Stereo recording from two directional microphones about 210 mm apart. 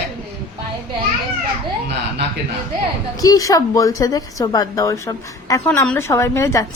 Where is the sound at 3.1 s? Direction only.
15° left (ahead or behind).